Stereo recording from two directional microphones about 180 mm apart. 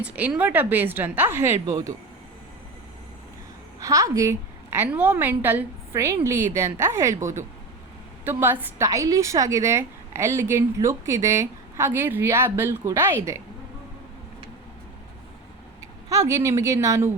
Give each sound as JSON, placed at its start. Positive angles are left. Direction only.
{"t": 0.0, "sound": "a woman's voice", "side_deg": -10}
{"t": 3.8, "sound": "a woman's voice", "side_deg": -20}
{"t": 16.0, "sound": "a woman's voice", "side_deg": -15}